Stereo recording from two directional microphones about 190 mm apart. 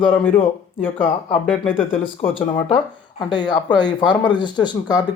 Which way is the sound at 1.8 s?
30° left (ahead or behind).